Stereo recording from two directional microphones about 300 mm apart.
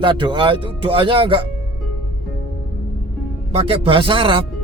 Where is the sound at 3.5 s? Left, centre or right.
Centre.